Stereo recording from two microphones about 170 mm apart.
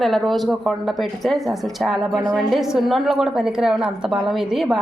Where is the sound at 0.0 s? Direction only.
Centre (ahead or behind).